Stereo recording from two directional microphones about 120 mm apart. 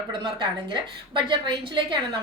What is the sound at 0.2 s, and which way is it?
A woman's voice, 40° right (ahead or behind).